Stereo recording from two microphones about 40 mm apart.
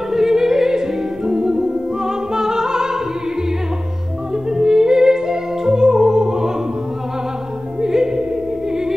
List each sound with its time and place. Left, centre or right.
0.1 s music: centre
4.5 s music: centre
7.8 s music: centre